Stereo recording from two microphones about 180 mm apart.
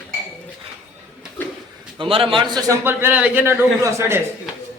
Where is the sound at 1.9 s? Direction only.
30° right (ahead or behind).